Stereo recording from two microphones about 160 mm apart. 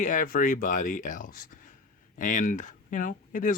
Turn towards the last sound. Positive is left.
turn(degrees=55)  # may be behind; listen again after turning